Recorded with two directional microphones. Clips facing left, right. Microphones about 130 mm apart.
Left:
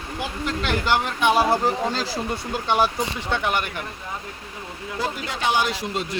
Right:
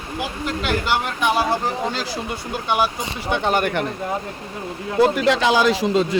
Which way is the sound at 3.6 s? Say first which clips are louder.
Right 10 dB; 65° right (ahead or behind).